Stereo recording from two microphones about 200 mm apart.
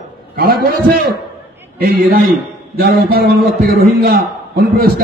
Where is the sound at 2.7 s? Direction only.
50° right (ahead or behind).